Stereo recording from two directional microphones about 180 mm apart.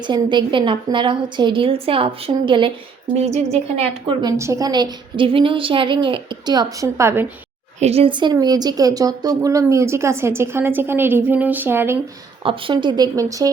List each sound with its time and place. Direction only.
0.1 s a woman's voice: 25° right (ahead or behind)
4.2 s a woman's voice: 20° right (ahead or behind)
7.8 s speech: 35° right (ahead or behind); by 11.9 s 10° right (ahead or behind)
12.4 s a woman's voice: 30° right (ahead or behind)